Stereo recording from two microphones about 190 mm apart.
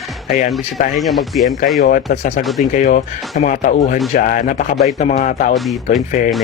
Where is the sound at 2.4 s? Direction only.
Centre (ahead or behind).